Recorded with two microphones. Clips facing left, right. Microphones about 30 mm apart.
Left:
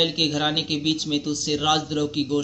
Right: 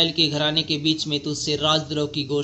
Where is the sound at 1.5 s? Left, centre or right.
Right.